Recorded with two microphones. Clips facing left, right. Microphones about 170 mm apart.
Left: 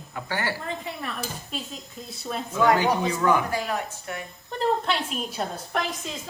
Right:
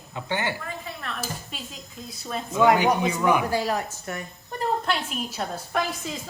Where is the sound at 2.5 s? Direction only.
15° right (ahead or behind).